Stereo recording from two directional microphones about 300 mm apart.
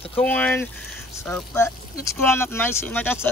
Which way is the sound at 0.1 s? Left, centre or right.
Centre.